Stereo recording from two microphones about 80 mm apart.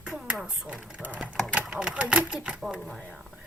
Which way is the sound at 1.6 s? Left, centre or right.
Centre.